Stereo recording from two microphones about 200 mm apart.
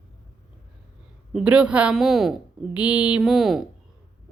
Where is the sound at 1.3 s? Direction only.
5° right (ahead or behind).